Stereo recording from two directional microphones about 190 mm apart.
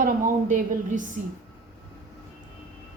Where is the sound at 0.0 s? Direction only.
45° right (ahead or behind).